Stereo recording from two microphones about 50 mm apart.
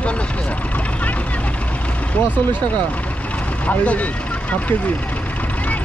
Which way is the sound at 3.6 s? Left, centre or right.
Left.